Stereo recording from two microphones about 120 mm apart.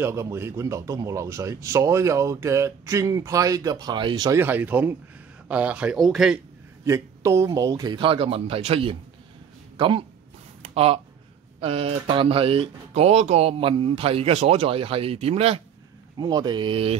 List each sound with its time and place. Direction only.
0.0 s speech: 25° right (ahead or behind); by 4.3 s 40° right (ahead or behind)
4.3 s speech: 15° right (ahead or behind)
5.9 s speech: centre (ahead or behind)
6.9 s a man's voice: 25° right (ahead or behind); by 10.0 s 45° right (ahead or behind)
10.6 s a sound: 55° right (ahead or behind)
11.6 s speech: 50° right (ahead or behind)
16.2 s a man's voice: 35° right (ahead or behind); by 17.0 s 50° right (ahead or behind)